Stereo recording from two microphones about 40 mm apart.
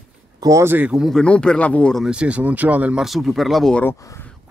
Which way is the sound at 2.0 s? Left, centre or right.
Right.